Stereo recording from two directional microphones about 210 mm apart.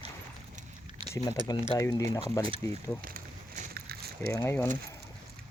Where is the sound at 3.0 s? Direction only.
40° right (ahead or behind).